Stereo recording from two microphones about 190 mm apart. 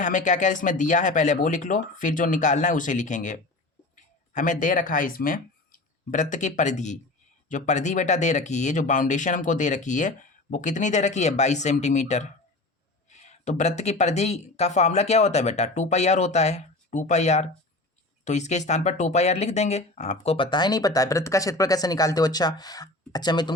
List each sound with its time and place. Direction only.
0.0 s speech: 40° left (ahead or behind); by 23.5 s 20° left (ahead or behind)